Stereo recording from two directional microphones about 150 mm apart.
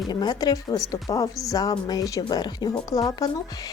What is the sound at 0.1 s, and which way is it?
Speech, 30° left (ahead or behind).